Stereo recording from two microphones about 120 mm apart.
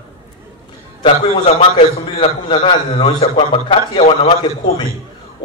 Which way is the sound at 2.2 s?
45° left (ahead or behind).